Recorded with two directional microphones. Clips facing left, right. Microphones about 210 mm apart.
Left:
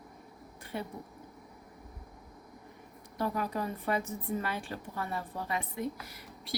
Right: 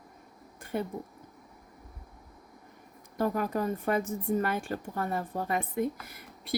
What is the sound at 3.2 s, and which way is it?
A woman's voice, 45° right (ahead or behind).